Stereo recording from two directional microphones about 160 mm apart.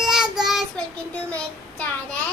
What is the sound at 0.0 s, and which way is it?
Child singing, 5° right (ahead or behind).